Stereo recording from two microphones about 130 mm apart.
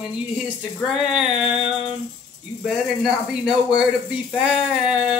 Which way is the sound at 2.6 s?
5° right (ahead or behind).